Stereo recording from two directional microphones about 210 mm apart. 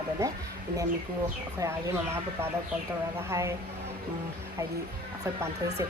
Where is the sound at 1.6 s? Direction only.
15° right (ahead or behind).